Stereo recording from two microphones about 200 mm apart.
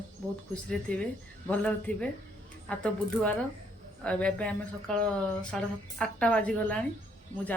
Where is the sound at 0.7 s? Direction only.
5° left (ahead or behind).